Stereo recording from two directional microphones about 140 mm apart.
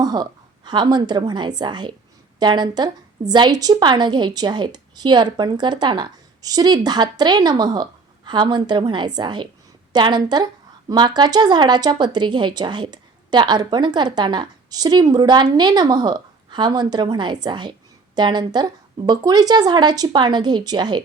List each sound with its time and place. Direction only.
0.0 s speech: 30° right (ahead or behind)